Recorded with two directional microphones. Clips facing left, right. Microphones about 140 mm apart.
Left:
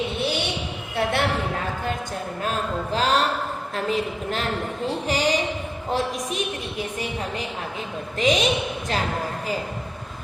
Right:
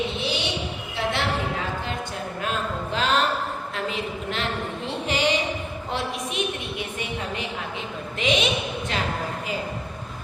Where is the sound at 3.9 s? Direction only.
40° left (ahead or behind).